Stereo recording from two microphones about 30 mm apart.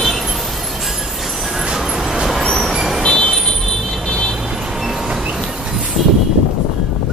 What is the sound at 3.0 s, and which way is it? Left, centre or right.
Vehicle, left.